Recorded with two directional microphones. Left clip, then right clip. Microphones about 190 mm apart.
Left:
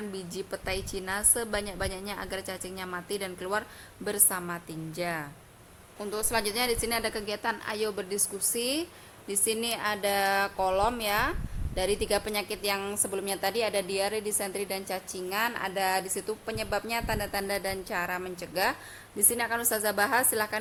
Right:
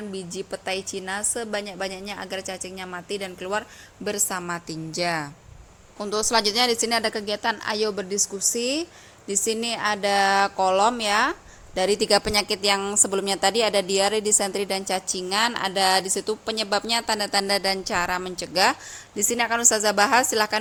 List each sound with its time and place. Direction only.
0.5 s speech: 10° right (ahead or behind)
0.8 s a woman's voice: 20° left (ahead or behind)
1.0 s speech: 10° right (ahead or behind)
4.0 s a woman's voice: 20° right (ahead or behind)